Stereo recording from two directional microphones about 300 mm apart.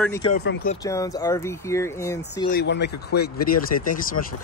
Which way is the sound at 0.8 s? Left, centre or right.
Centre.